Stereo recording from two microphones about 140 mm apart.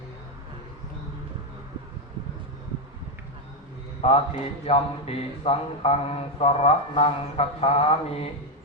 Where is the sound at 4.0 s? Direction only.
45° left (ahead or behind).